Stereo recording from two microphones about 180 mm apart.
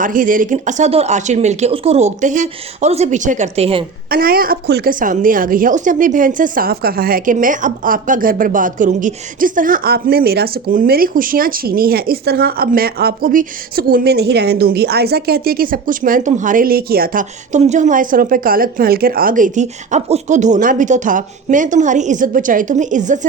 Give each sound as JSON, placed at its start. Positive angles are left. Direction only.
{"t": 0.0, "sound": "speech", "side_deg": -50}
{"t": 4.1, "sound": "a woman's voice", "side_deg": -55}